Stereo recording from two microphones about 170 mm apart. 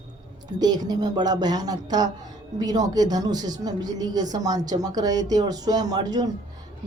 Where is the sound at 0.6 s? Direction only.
25° right (ahead or behind).